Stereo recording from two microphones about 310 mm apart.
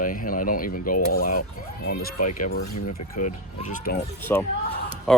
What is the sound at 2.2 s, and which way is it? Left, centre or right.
Speech, left.